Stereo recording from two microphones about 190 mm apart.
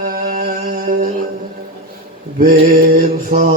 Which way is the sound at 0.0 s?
55° right (ahead or behind).